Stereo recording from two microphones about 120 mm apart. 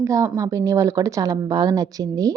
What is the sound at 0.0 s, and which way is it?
A woman's voice, 25° right (ahead or behind).